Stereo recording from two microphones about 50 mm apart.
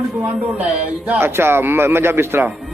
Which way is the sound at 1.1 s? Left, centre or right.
Right.